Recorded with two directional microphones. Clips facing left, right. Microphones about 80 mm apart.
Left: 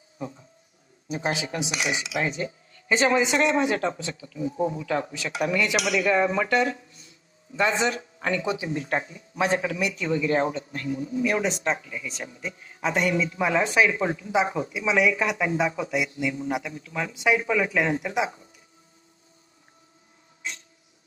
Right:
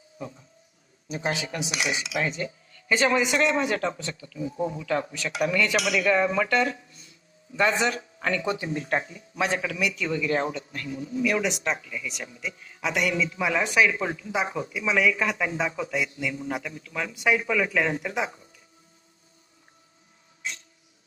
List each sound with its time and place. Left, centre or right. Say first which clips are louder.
1.3 s speech: left 1 dB; left